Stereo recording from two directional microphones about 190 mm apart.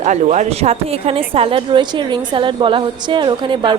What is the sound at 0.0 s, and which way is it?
A woman's voice, 40° right (ahead or behind).